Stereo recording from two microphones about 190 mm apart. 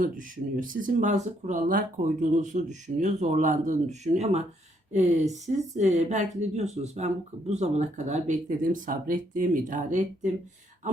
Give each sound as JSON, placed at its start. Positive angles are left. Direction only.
{"t": 0.0, "sound": "speech", "side_deg": -45}